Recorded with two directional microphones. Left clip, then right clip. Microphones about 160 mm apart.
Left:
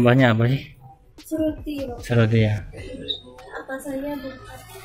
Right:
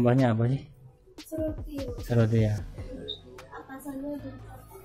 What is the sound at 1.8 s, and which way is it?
Speech, centre (ahead or behind).